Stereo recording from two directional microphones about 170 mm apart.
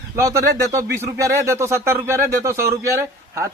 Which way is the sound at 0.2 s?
15° right (ahead or behind).